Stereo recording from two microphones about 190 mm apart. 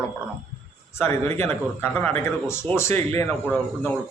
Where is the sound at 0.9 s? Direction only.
10° left (ahead or behind).